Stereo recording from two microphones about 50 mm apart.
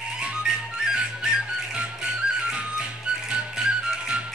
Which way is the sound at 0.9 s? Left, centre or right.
Centre.